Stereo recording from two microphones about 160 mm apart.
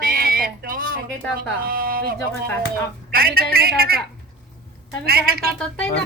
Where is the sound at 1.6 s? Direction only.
65° right (ahead or behind).